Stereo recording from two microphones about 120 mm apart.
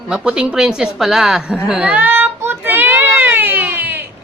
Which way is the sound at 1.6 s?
10° right (ahead or behind).